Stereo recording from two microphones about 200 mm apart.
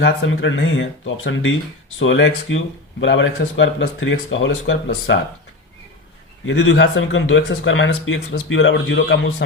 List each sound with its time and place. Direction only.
0.0 s speech: 70° left (ahead or behind)
6.4 s speech: 70° left (ahead or behind)